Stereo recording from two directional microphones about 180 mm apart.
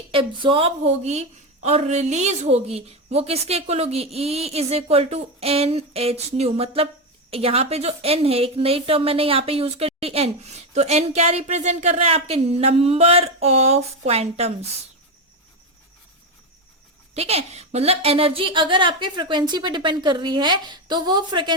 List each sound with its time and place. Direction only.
0.1 s a woman's voice: 30° right (ahead or behind)
17.2 s a woman's voice: 35° right (ahead or behind)